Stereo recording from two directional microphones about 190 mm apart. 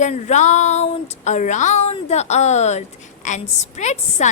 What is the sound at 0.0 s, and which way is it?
A woman's voice, 40° left (ahead or behind).